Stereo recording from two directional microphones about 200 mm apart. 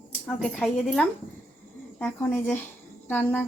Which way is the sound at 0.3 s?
5° left (ahead or behind).